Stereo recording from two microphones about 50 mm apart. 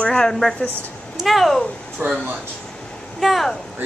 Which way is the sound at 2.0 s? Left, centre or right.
Right.